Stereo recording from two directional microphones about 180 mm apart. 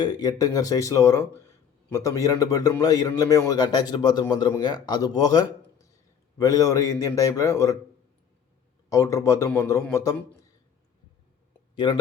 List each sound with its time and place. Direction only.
0.0 s a man's voice: 20° left (ahead or behind)
8.9 s a man's voice: 15° left (ahead or behind)
11.7 s speech: 25° left (ahead or behind)